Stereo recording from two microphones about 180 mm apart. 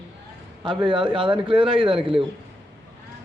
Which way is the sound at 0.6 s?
25° right (ahead or behind).